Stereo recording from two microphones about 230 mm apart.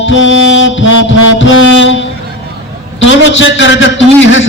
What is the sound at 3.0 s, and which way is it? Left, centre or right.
Music, left.